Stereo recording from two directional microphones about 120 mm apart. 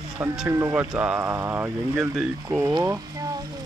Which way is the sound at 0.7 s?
10° right (ahead or behind).